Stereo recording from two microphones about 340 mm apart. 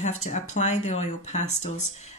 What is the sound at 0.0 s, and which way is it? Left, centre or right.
Speech, left.